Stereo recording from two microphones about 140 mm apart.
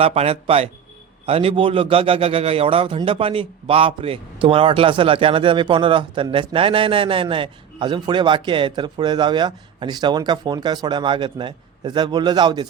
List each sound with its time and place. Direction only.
0.0 s a man's voice: 45° right (ahead or behind); by 12.6 s 30° right (ahead or behind)